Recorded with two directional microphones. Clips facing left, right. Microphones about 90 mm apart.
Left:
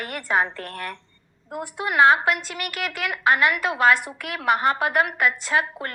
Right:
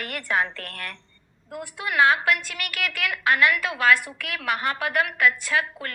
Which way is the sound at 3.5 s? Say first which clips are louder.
Left 2 dB; 30° left (ahead or behind).